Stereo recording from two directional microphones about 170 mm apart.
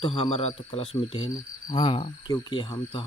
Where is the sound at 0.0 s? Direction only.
35° left (ahead or behind).